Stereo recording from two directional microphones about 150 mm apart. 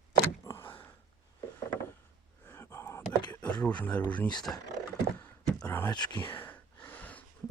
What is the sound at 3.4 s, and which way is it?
Speech, 10° left (ahead or behind).